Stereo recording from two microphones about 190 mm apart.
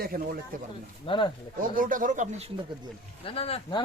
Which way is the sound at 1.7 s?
45° right (ahead or behind).